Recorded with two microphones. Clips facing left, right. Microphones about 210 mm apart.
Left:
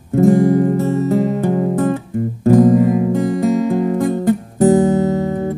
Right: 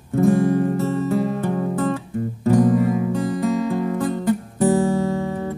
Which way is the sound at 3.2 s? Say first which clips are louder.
Left 5 dB; 20° left (ahead or behind).